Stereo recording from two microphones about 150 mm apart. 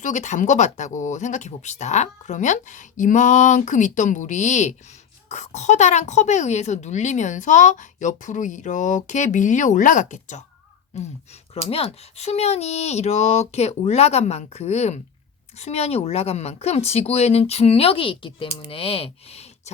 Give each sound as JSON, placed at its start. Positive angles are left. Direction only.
{"t": 0.0, "sound": "a woman's voice", "side_deg": 50}
{"t": 11.7, "sound": "a woman's voice", "side_deg": 40}